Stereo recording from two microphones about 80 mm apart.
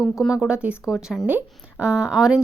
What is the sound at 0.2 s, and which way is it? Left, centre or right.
Speech, centre.